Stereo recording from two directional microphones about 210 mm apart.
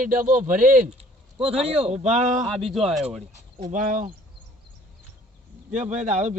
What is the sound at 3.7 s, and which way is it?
Speech, 35° right (ahead or behind).